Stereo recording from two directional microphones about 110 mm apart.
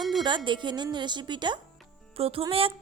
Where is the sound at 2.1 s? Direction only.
60° right (ahead or behind).